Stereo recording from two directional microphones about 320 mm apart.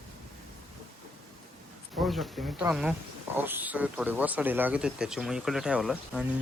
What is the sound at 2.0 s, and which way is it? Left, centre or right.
A man's voice, centre.